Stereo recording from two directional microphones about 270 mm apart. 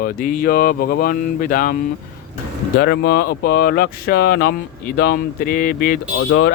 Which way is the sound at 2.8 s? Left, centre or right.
Left.